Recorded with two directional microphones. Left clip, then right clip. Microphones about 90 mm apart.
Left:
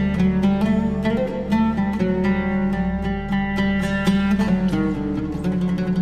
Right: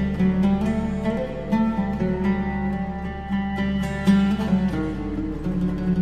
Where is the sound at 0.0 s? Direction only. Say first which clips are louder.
Left 2 dB; 25° right (ahead or behind).